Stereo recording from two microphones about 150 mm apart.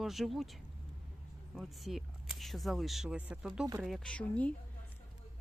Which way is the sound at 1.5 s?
Centre (ahead or behind).